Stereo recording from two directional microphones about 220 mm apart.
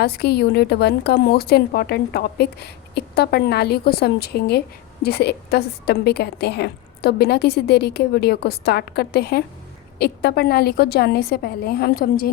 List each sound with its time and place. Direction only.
0.0 s a woman's voice: 45° left (ahead or behind)